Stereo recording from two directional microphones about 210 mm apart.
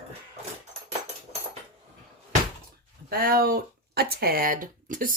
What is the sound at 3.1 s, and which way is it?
Speech, 45° right (ahead or behind).